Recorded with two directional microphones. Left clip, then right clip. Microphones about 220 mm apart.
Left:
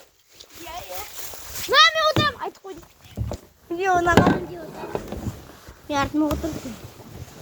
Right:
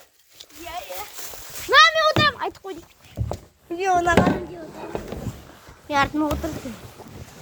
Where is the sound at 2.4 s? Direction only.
20° right (ahead or behind).